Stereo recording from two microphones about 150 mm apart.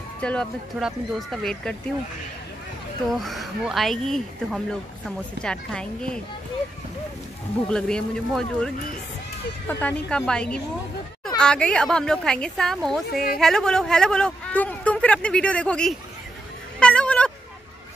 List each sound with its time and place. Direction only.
0.2 s speech: 5° left (ahead or behind)
3.1 s speech: centre (ahead or behind)
7.7 s speech: 5° left (ahead or behind)
13.1 s speech: 80° left
13.4 s speech: 5° left (ahead or behind)
16.8 s cat: 5° left (ahead or behind)